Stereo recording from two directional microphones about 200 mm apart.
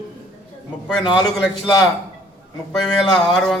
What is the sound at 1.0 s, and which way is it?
Speech, 25° left (ahead or behind).